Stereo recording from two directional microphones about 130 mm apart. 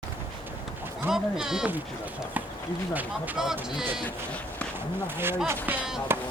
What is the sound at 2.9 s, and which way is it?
Speech, 15° right (ahead or behind).